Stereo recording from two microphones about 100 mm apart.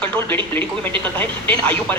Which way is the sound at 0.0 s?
20° left (ahead or behind).